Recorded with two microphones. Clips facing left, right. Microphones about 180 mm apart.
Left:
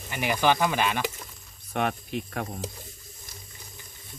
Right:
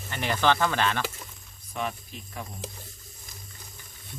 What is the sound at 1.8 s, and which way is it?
Speech, 65° left (ahead or behind).